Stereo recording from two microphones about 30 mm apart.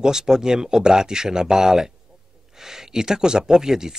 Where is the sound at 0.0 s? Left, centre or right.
Right.